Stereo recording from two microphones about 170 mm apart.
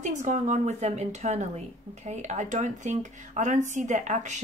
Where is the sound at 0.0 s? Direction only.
45° right (ahead or behind).